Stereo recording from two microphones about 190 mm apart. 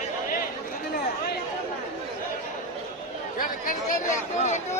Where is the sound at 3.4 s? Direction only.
45° left (ahead or behind).